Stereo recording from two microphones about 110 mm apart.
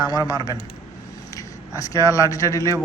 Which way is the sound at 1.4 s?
30° left (ahead or behind).